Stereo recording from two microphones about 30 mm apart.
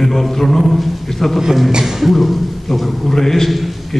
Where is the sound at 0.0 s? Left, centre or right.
Centre.